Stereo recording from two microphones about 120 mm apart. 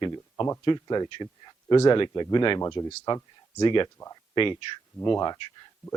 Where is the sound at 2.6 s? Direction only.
30° left (ahead or behind).